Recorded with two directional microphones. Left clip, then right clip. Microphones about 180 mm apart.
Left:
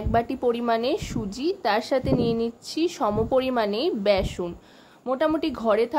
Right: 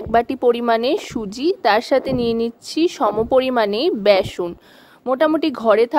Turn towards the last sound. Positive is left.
turn(degrees=-45)  # may be behind; listen again after turning